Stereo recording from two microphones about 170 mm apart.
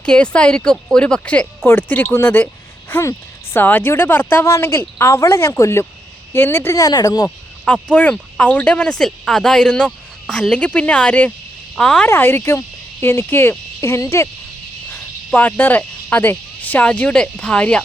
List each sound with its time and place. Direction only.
0.0 s a woman's voice: 5° left (ahead or behind); by 7.3 s 20° left (ahead or behind)
7.3 s a woman's voice: 5° left (ahead or behind)